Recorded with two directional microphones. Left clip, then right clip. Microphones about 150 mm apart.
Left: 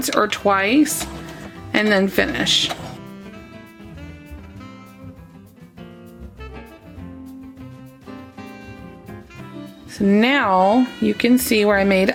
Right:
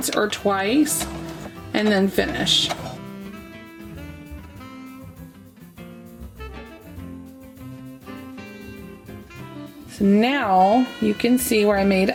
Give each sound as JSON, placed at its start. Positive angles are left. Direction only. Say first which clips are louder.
{"t": 0.0, "sound": "speech", "louder": "left 4 dB", "side_deg": 25}
{"t": 3.0, "sound": "music", "louder": "even", "side_deg": 0}
{"t": 8.1, "sound": "music", "louder": "left 2 dB", "side_deg": 0}
{"t": 10.1, "sound": "speech", "louder": "left 3 dB", "side_deg": 30}
{"t": 10.6, "sound": "speech", "louder": "left 1 dB", "side_deg": 0}
{"t": 11.0, "sound": "speech", "louder": "left 3 dB", "side_deg": 25}